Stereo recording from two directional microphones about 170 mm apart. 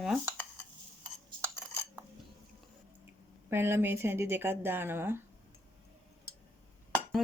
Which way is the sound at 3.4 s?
15° right (ahead or behind).